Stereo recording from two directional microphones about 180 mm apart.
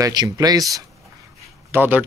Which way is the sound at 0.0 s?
20° right (ahead or behind).